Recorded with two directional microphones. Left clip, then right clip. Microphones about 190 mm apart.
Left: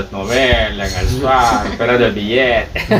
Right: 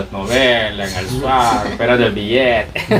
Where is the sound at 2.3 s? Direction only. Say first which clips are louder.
Even; 30° right (ahead or behind).